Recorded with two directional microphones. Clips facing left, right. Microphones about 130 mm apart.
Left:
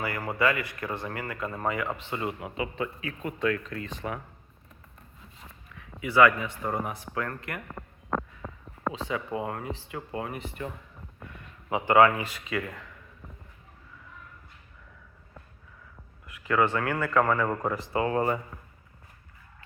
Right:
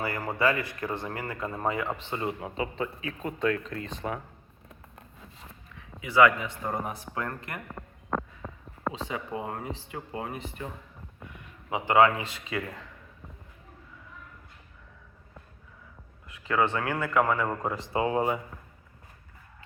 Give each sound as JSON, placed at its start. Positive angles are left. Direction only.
{"t": 0.0, "sound": "speech", "side_deg": -25}
{"t": 5.7, "sound": "a sound", "side_deg": -20}
{"t": 6.8, "sound": "speech", "side_deg": -25}
{"t": 8.9, "sound": "speech", "side_deg": -25}
{"t": 11.7, "sound": "speech", "side_deg": -20}
{"t": 16.2, "sound": "a man's voice", "side_deg": -25}
{"t": 17.7, "sound": "speech", "side_deg": -25}